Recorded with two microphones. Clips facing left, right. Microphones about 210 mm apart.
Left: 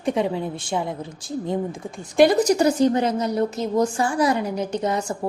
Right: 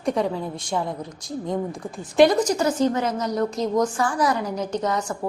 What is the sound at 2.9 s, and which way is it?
Speech, 30° left (ahead or behind).